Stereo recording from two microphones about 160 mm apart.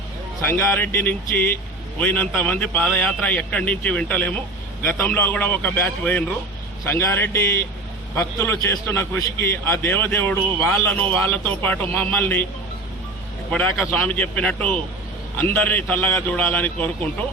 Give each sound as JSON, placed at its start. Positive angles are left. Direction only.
{"t": 0.4, "sound": "a man's voice", "side_deg": 15}
{"t": 13.5, "sound": "a man's voice", "side_deg": 10}